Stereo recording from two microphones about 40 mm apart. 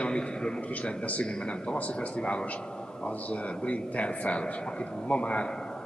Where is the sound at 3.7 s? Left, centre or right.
Left.